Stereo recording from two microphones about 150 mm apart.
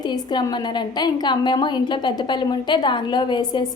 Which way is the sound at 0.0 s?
30° left (ahead or behind).